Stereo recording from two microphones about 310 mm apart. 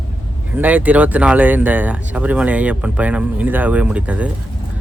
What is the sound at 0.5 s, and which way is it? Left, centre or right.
Speech, centre.